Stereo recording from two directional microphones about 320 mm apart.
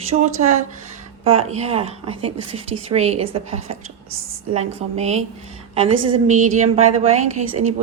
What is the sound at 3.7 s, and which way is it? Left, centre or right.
Speech, right.